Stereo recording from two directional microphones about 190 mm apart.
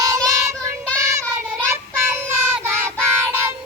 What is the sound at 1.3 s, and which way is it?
Child singing, 15° right (ahead or behind).